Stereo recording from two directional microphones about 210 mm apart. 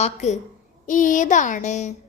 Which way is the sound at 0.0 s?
30° left (ahead or behind).